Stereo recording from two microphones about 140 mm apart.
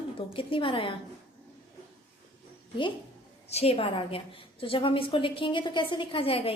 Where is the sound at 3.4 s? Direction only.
50° left (ahead or behind).